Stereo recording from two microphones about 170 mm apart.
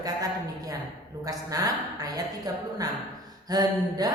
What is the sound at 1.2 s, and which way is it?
A woman's voice, 20° right (ahead or behind).